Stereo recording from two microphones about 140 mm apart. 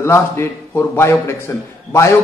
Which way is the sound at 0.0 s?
20° left (ahead or behind).